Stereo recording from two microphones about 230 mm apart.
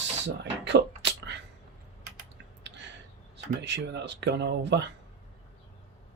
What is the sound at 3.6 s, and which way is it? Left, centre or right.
Speech, right.